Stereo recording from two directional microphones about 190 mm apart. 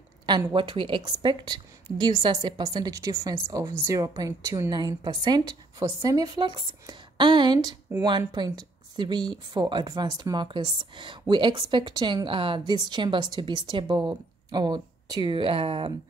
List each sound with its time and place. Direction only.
0.3 s a woman's voice: 20° right (ahead or behind)